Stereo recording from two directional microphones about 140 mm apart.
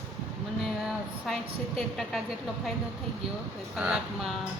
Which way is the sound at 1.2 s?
Centre (ahead or behind).